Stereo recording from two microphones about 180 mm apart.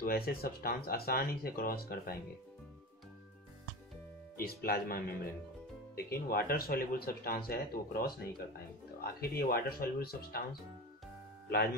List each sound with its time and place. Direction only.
0.0 s speech: 55° left (ahead or behind)
4.4 s speech: 55° left (ahead or behind)
11.4 s speech: 60° left (ahead or behind)